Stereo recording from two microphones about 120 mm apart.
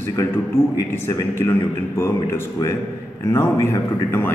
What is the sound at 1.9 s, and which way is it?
A man's voice, 20° left (ahead or behind).